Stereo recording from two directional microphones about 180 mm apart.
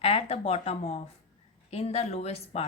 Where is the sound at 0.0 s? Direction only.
35° left (ahead or behind).